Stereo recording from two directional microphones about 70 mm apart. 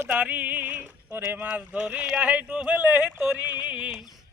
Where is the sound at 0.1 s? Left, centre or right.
Right.